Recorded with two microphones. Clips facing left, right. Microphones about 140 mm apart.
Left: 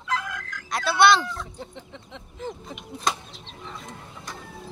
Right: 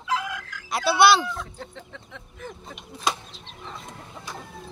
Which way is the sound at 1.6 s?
20° left (ahead or behind).